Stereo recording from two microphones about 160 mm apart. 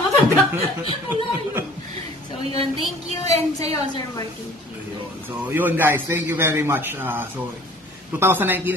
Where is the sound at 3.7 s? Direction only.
25° left (ahead or behind).